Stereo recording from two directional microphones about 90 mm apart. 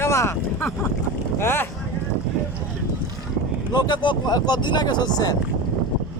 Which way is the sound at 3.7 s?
55° left (ahead or behind).